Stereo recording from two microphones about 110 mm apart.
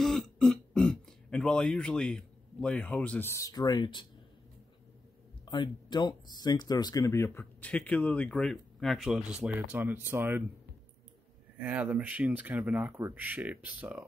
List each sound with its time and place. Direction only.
0.0 s throat clearing: 5° left (ahead or behind); by 3.4 s 20° left (ahead or behind)
3.4 s speech: 35° left (ahead or behind)
5.4 s speech: 45° left (ahead or behind); by 7.4 s 25° left (ahead or behind)
7.6 s speech: 15° left (ahead or behind)
9.2 s speech: 10° right (ahead or behind)
11.6 s speech: 15° right (ahead or behind)